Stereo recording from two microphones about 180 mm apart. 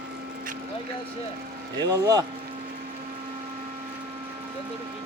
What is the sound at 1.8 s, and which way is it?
Speech, 20° right (ahead or behind).